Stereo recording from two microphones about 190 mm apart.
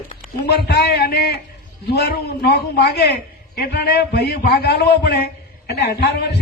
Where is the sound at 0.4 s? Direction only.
60° left (ahead or behind).